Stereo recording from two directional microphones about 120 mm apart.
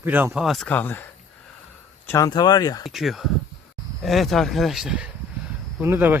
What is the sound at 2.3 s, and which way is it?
Speech, 35° left (ahead or behind).